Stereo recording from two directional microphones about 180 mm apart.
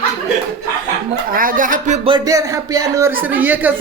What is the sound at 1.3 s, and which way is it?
Speech, 50° right (ahead or behind).